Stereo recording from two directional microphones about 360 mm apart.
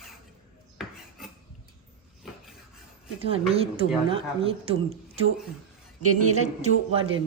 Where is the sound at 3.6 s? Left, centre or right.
Centre.